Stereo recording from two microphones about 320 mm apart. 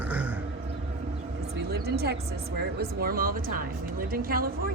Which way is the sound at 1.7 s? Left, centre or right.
Right.